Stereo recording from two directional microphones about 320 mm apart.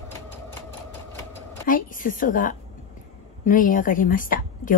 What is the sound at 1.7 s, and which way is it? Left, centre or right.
A woman's voice, left.